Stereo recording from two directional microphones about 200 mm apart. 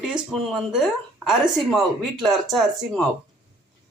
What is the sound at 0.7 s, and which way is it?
Speech, centre (ahead or behind).